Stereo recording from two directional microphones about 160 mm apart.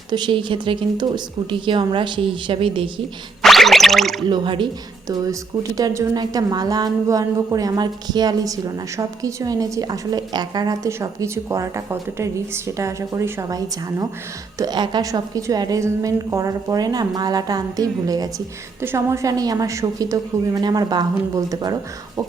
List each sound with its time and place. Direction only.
0.1 s speech: 30° right (ahead or behind)
3.4 s music: centre (ahead or behind)
4.3 s speech: 30° right (ahead or behind)